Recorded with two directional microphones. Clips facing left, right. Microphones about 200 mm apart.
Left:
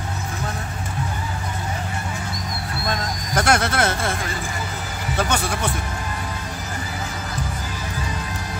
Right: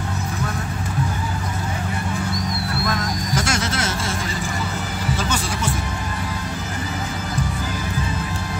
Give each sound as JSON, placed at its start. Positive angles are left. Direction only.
{"t": 3.3, "sound": "speech", "side_deg": 60}